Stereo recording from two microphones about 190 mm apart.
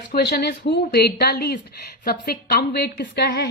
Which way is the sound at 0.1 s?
60° left (ahead or behind).